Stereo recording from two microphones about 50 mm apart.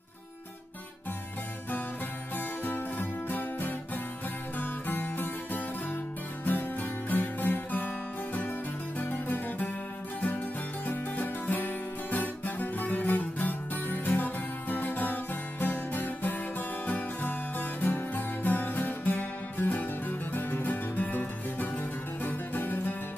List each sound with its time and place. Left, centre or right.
2.3 s music: left
9.0 s music: left
10.9 s music: left